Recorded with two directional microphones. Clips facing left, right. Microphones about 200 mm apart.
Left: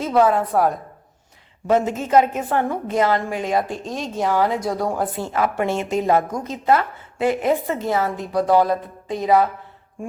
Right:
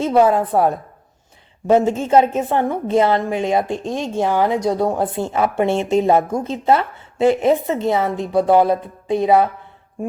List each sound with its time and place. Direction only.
0.0 s a woman's voice: 25° right (ahead or behind)